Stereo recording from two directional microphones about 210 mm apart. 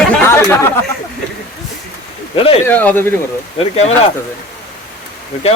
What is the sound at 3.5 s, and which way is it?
Speech, 30° left (ahead or behind).